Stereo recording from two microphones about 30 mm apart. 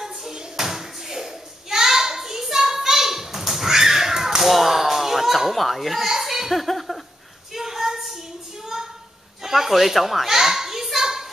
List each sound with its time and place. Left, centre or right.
0.3 s cupboard open or close: right
0.7 s a sound: centre
4.4 s slap: centre
6.0 s speech: centre
6.6 s a sound: centre
7.5 s female singing: centre
9.4 s speech: centre
10.2 s children playing: centre